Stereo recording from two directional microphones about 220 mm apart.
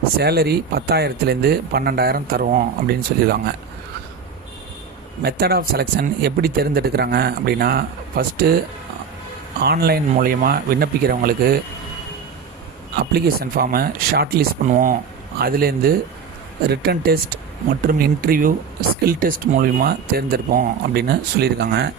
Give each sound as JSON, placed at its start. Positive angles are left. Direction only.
{"t": 0.2, "sound": "speech", "side_deg": -45}
{"t": 5.2, "sound": "speech", "side_deg": -45}
{"t": 9.6, "sound": "speech", "side_deg": -45}
{"t": 13.1, "sound": "a man's voice", "side_deg": -45}